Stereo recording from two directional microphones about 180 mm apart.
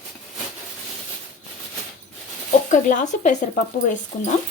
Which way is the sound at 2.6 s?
45° left (ahead or behind).